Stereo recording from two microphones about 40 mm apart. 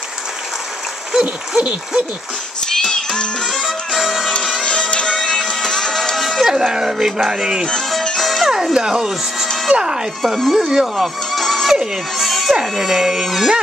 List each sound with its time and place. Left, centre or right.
1.6 s speech: right
2.6 s music: centre
3.6 s music: centre
4.6 s music: left
6.1 s music: centre
6.4 s speech: centre
8.2 s music: centre
8.7 s speech: centre
10.2 s speech: centre
10.6 s speech: centre
11.3 s music: centre
12.2 s cat: centre
12.5 s speech: centre